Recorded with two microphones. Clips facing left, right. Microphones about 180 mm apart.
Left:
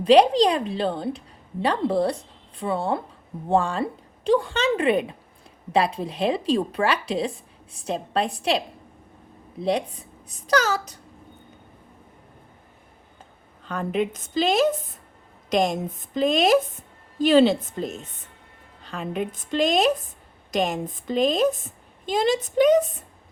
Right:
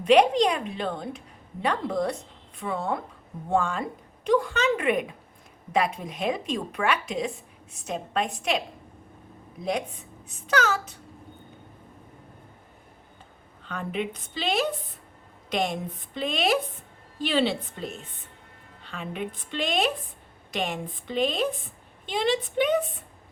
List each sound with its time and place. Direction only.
0.0 s a woman's voice: 35° left (ahead or behind)
13.7 s a woman's voice: 40° left (ahead or behind)